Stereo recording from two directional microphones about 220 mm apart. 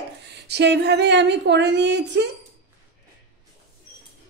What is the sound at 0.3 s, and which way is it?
A woman's voice, 50° right (ahead or behind).